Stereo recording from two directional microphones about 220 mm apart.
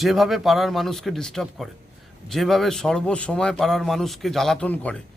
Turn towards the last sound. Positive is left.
turn(degrees=5)  # may be behind; listen again after turning